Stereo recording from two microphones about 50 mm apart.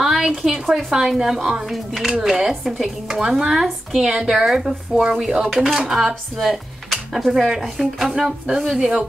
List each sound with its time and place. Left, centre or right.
0.0 s a woman's voice: centre
3.6 s speech: centre
4.1 s a woman's voice: centre